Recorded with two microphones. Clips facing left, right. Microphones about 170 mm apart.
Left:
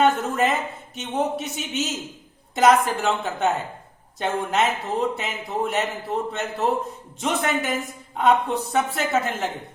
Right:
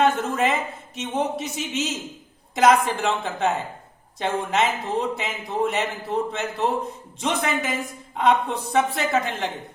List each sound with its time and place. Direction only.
0.0 s a man's voice: centre (ahead or behind)